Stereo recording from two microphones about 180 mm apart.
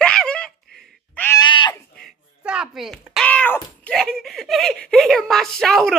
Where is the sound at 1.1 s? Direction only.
10° left (ahead or behind).